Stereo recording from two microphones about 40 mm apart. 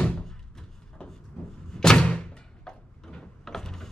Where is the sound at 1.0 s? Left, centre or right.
Left.